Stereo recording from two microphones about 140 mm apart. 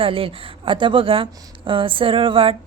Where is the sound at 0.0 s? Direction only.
40° right (ahead or behind).